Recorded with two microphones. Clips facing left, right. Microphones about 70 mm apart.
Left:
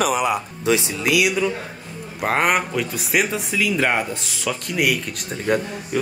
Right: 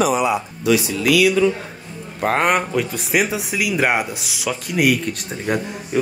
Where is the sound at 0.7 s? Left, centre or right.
Left.